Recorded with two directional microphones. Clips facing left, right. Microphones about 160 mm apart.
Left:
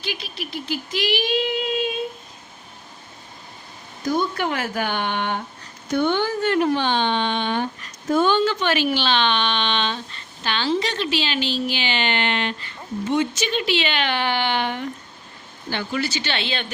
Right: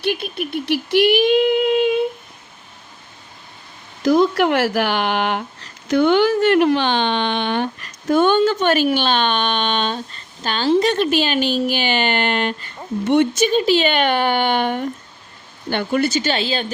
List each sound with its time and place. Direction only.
0.0 s a sound: 55° right (ahead or behind)
4.0 s speech: 90° right; by 12.7 s 45° right (ahead or behind)
13.1 s speech: 60° right (ahead or behind)
13.5 s speech: 40° right (ahead or behind)